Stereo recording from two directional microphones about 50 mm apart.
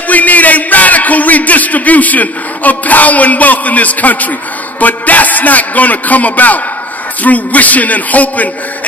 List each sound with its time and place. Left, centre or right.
0.1 s music: left